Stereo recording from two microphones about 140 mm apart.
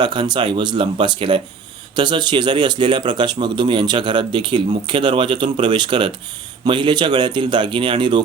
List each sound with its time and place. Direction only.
0.0 s a man's voice: 35° right (ahead or behind)